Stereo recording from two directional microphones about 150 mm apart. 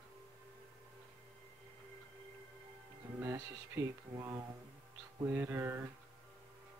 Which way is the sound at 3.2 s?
20° right (ahead or behind).